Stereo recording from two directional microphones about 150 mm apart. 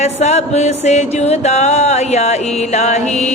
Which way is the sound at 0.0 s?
45° left (ahead or behind).